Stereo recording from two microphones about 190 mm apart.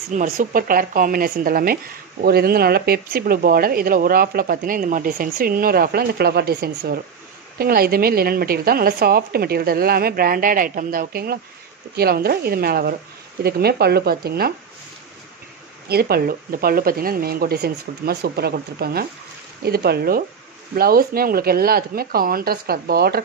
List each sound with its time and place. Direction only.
0.1 s speech: 45° right (ahead or behind)
15.9 s speech: 55° right (ahead or behind)